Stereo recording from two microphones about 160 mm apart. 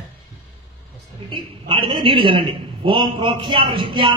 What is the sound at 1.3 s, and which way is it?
A man's voice, 30° right (ahead or behind).